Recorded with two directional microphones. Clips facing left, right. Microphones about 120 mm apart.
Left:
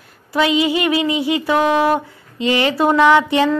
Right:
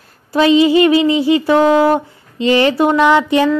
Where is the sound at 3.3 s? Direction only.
20° left (ahead or behind).